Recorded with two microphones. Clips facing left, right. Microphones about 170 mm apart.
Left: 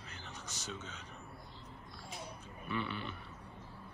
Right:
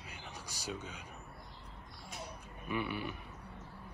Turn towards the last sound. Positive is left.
turn(degrees=-10)  # may be behind; listen again after turning